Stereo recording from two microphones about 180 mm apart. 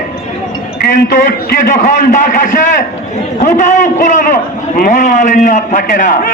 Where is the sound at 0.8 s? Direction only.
45° left (ahead or behind).